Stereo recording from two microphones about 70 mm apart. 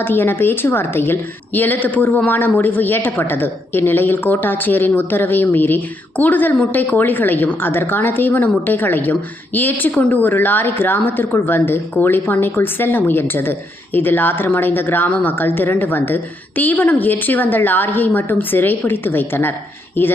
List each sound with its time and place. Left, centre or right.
0.0 s a woman's voice: left